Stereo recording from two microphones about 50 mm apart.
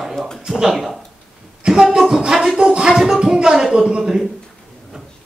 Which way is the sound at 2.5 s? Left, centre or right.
Centre.